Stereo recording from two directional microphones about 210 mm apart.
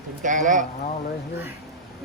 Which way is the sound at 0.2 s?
35° right (ahead or behind).